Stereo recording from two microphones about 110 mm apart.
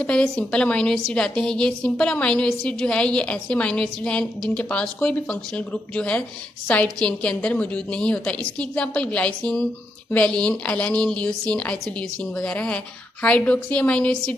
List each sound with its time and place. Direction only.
0.0 s a woman's voice: 10° left (ahead or behind)